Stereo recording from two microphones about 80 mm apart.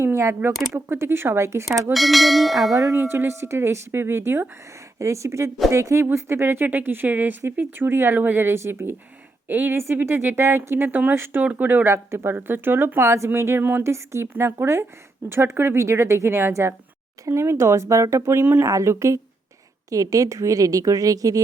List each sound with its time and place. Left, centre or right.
0.0 s a sound: right
0.7 s speech: right
1.9 s bell: centre
3.0 s speech: right
13.8 s a woman's voice: right